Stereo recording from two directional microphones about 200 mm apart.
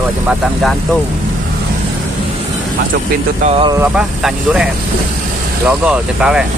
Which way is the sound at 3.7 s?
5° right (ahead or behind).